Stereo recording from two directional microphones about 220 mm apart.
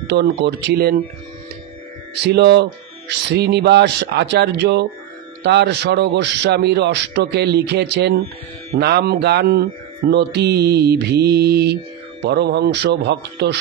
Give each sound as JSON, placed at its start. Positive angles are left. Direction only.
{"t": 0.1, "sound": "speech", "side_deg": -50}
{"t": 2.1, "sound": "speech", "side_deg": -50}